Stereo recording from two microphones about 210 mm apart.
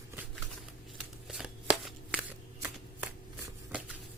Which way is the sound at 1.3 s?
Centre (ahead or behind).